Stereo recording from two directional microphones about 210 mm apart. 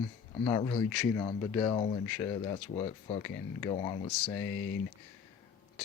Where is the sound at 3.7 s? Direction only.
25° left (ahead or behind).